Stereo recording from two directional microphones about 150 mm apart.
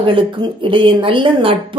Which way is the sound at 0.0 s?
35° right (ahead or behind).